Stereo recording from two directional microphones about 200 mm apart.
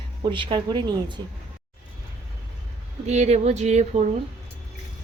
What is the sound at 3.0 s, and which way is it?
Speech, 35° right (ahead or behind).